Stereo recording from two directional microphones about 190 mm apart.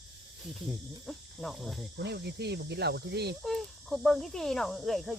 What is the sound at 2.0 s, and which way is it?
Speech, 60° right (ahead or behind).